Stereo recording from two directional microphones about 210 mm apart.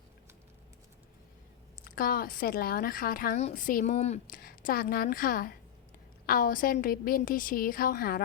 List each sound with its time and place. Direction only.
1.8 s a woman's voice: 45° left (ahead or behind)